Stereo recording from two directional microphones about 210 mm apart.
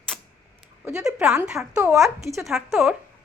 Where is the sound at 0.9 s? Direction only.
5° right (ahead or behind).